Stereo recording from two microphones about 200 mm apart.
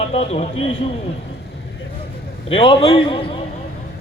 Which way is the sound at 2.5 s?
25° left (ahead or behind).